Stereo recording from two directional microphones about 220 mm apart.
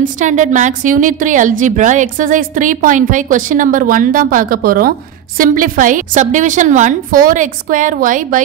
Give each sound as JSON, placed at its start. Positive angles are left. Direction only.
{"t": 0.0, "sound": "a woman's voice", "side_deg": -35}